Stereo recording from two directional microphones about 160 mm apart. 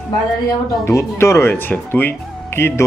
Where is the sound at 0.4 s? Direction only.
15° left (ahead or behind).